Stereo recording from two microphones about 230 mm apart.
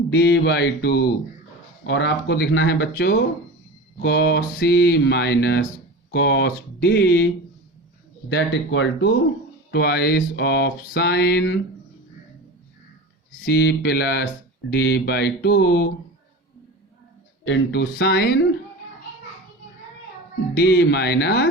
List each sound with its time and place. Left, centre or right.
0.1 s speech: left
8.3 s speech: left
13.4 s speech: left
17.4 s speech: left
20.5 s speech: left